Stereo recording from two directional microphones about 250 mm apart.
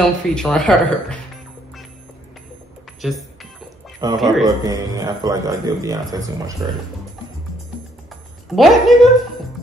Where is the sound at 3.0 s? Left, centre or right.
Centre.